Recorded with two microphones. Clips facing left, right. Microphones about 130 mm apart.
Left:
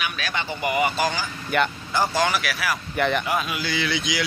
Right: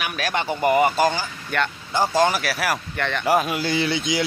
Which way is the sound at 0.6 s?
40° right (ahead or behind).